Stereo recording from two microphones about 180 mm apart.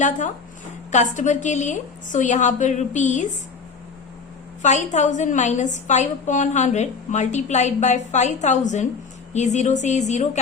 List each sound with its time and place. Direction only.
0.9 s a woman's voice: 45° left (ahead or behind)
4.6 s a woman's voice: 40° left (ahead or behind)